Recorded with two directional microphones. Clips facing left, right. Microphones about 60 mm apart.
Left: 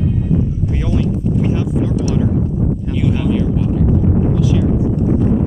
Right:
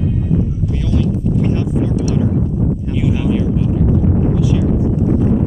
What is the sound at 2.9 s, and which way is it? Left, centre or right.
Speech, centre.